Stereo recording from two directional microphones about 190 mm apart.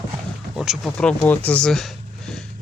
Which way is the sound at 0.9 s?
10° left (ahead or behind).